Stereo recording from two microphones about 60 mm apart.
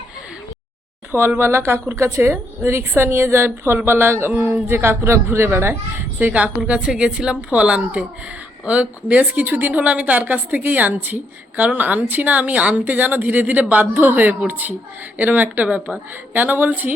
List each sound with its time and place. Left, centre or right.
1.4 s a woman's voice: right
6.1 s a woman's voice: right